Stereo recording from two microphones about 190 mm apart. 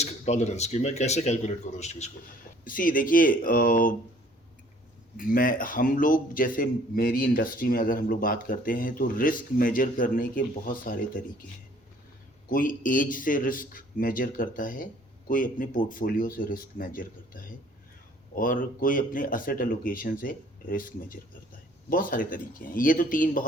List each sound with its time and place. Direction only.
0.0 s speech: 35° left (ahead or behind)
2.6 s a man's voice: 45° left (ahead or behind)
5.1 s a man's voice: 45° left (ahead or behind)
12.5 s a man's voice: 45° left (ahead or behind)